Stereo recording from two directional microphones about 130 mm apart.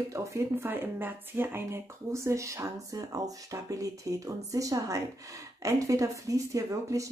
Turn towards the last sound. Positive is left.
turn(degrees=-25)  # may be behind; listen again after turning